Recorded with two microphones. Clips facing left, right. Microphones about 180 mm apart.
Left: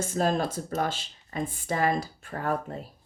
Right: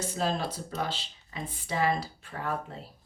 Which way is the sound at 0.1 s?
50° left (ahead or behind).